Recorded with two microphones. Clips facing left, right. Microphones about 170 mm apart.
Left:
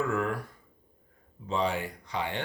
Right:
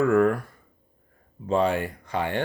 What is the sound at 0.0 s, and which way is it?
Speech, 55° right (ahead or behind).